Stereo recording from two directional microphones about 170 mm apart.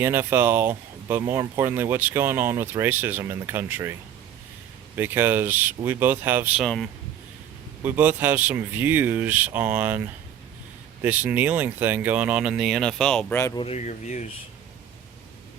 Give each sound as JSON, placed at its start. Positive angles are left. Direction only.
{"t": 0.0, "sound": "speech", "side_deg": -15}
{"t": 4.9, "sound": "speech", "side_deg": -10}
{"t": 6.6, "sound": "speech", "side_deg": 0}
{"t": 7.8, "sound": "speech", "side_deg": -10}
{"t": 11.0, "sound": "speech", "side_deg": -10}
{"t": 13.6, "sound": "speech", "side_deg": 40}